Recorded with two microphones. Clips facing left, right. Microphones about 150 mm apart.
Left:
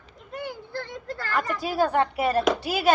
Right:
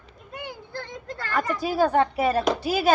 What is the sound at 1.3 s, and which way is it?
Speech, 40° right (ahead or behind).